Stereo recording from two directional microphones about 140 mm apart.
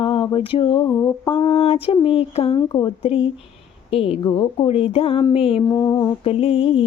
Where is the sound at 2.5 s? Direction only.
30° left (ahead or behind).